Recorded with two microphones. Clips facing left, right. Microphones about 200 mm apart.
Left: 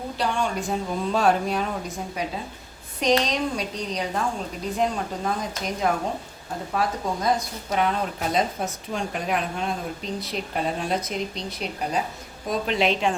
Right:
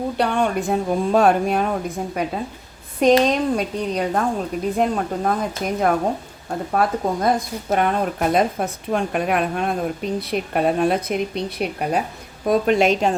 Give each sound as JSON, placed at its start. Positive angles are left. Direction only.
{"t": 0.2, "sound": "a woman's voice", "side_deg": -60}
{"t": 12.5, "sound": "a woman's voice", "side_deg": -50}